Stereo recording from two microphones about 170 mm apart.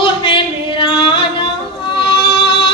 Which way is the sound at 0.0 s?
30° left (ahead or behind).